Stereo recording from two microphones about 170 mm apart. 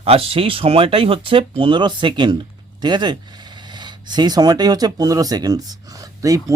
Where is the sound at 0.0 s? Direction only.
35° right (ahead or behind).